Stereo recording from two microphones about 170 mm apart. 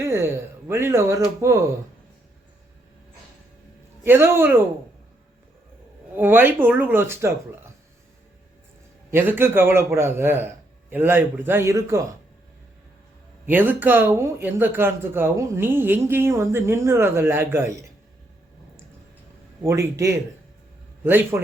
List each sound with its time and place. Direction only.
0.0 s a sound: 15° right (ahead or behind)
0.7 s a man's voice: 15° right (ahead or behind)
4.0 s a man's voice: 15° right (ahead or behind)
6.1 s a man's voice: 10° right (ahead or behind)
9.1 s a man's voice: 10° right (ahead or behind)
13.4 s a man's voice: 10° right (ahead or behind)
19.6 s a man's voice: 15° right (ahead or behind)